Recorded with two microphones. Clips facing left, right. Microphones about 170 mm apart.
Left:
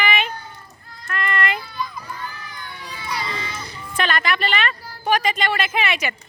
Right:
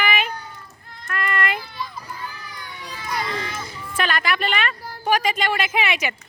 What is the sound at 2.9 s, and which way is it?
Children playing, 45° right (ahead or behind).